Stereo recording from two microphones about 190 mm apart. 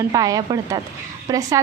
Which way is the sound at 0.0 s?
20° right (ahead or behind).